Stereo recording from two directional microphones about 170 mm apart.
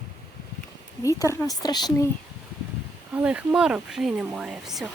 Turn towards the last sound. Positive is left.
turn(degrees=0)  # may be behind; listen again after turning